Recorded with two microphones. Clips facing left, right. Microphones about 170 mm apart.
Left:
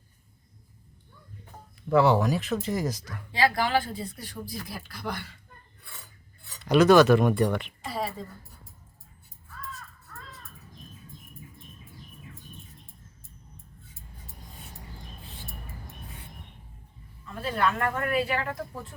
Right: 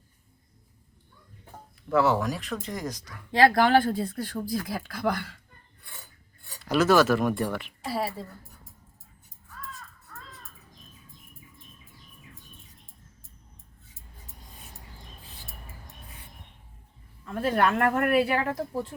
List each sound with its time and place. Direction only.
1.9 s speech: centre (ahead or behind)
3.3 s speech: 50° right (ahead or behind)
4.7 s speech: 90° right
6.6 s speech: centre (ahead or behind)
17.4 s speech: 55° right (ahead or behind)
18.3 s speech: 35° right (ahead or behind)